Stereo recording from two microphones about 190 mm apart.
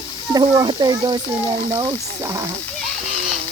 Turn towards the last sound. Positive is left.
turn(degrees=-20)  # may be behind; listen again after turning